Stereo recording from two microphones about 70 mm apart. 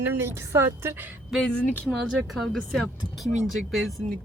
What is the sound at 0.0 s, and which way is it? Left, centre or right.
Speech, right.